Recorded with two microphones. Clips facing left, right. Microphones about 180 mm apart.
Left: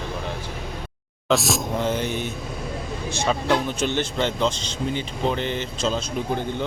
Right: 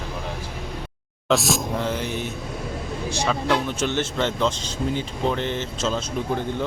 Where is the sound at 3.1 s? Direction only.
25° left (ahead or behind).